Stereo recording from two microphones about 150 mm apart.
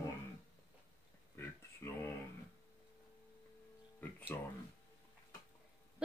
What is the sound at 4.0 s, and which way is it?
Music, 10° left (ahead or behind).